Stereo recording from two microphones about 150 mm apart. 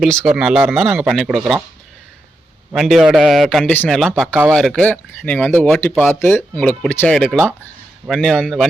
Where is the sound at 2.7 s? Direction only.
Centre (ahead or behind).